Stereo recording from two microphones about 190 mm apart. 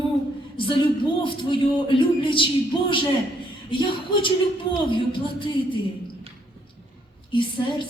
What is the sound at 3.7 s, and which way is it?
A man's voice, 25° left (ahead or behind).